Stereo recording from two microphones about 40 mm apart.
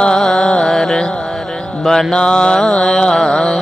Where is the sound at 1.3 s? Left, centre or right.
Centre.